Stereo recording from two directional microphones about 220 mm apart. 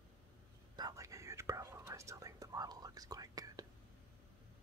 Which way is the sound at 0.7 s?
15° right (ahead or behind).